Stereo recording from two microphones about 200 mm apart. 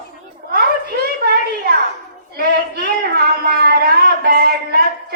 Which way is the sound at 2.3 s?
50° right (ahead or behind).